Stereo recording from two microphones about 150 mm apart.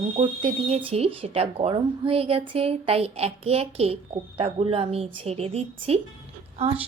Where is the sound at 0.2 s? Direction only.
40° right (ahead or behind).